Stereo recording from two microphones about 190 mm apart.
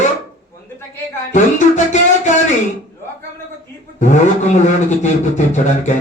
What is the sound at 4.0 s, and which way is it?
Speech, 40° left (ahead or behind).